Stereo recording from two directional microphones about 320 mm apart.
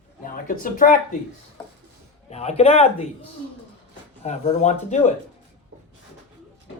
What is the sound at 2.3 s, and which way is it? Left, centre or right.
Speech, centre.